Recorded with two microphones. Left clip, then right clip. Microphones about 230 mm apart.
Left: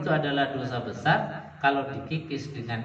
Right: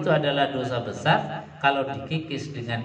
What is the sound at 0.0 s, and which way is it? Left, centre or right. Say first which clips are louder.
A man's voice: right 4 dB; right.